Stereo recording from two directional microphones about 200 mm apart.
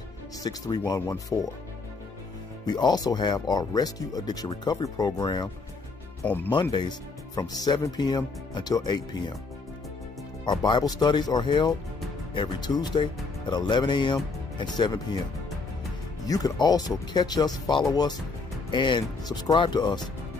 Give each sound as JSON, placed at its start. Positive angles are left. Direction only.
{"t": 0.4, "sound": "speech", "side_deg": 20}
{"t": 2.6, "sound": "speech", "side_deg": 20}
{"t": 6.2, "sound": "speech", "side_deg": 10}
{"t": 6.5, "sound": "speech", "side_deg": 20}
{"t": 10.4, "sound": "speech", "side_deg": 20}
{"t": 16.3, "sound": "speech", "side_deg": 20}